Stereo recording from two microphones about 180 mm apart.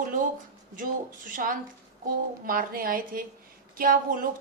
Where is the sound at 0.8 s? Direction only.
50° right (ahead or behind).